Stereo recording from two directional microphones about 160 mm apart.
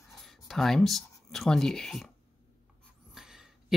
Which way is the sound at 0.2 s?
Centre (ahead or behind).